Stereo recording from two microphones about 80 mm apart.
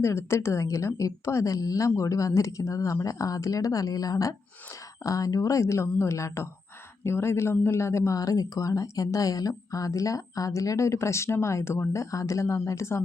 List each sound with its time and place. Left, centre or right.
0.0 s a woman's voice: left